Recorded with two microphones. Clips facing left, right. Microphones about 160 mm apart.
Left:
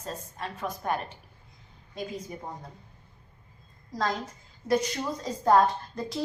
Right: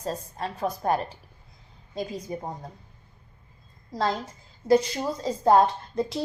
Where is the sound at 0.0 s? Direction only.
35° right (ahead or behind).